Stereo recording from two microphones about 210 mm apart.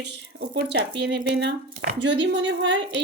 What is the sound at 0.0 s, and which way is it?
Speech, 55° right (ahead or behind).